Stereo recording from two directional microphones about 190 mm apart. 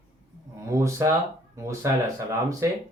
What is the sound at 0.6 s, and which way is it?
Speech, 15° right (ahead or behind).